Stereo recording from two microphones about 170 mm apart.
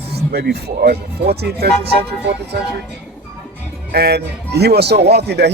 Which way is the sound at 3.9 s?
70° right (ahead or behind).